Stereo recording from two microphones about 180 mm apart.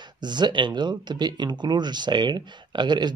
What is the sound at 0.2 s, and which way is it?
Speech, 25° right (ahead or behind).